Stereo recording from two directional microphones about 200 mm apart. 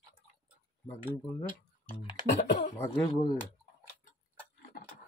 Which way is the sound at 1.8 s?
25° left (ahead or behind).